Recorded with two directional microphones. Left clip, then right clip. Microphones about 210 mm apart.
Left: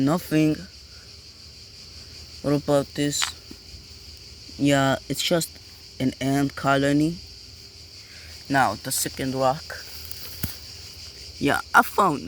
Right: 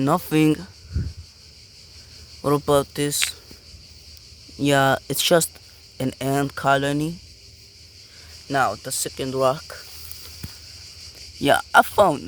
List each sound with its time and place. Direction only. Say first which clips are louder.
0.0 s speech: right 3 dB; 20° right (ahead or behind)
2.4 s speech: right 3 dB; 25° right (ahead or behind)
4.6 s speech: right 3 dB; 20° right (ahead or behind)
6.0 s cricket: right 1 dB; 20° right (ahead or behind)
8.4 s cricket: even; 5° right (ahead or behind)
10.4 s a sound: left 4 dB; 25° left (ahead or behind)
11.3 s cricket: right 3 dB; 20° right (ahead or behind)